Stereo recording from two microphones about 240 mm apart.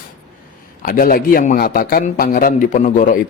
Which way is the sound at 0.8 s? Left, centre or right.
Left.